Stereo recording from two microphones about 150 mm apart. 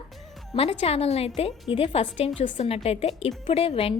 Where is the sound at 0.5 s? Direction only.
40° left (ahead or behind).